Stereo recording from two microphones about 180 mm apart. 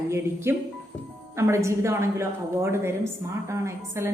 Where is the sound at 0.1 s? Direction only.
15° right (ahead or behind).